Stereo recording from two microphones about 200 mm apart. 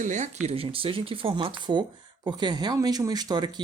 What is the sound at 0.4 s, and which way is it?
Speech, 30° right (ahead or behind).